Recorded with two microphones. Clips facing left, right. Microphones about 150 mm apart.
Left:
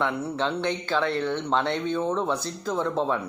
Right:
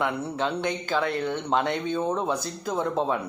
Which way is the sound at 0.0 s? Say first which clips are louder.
Even; 15° right (ahead or behind).